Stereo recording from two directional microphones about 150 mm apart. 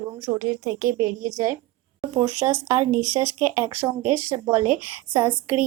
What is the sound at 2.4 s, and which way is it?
Speech, 15° right (ahead or behind).